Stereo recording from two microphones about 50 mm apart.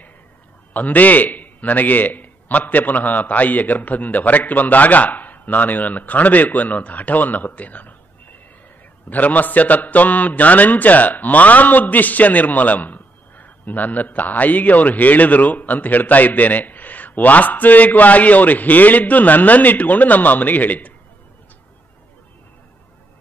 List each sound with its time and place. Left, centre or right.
0.7 s a man's voice: left